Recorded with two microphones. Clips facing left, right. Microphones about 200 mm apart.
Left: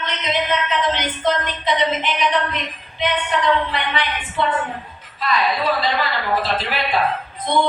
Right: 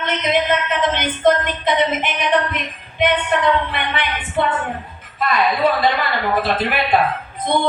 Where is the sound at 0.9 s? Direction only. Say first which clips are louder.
Right 5 dB; 50° right (ahead or behind).